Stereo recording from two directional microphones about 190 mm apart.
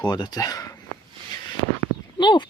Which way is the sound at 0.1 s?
20° left (ahead or behind).